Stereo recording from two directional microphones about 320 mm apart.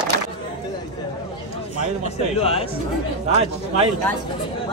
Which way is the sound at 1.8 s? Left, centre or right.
Centre.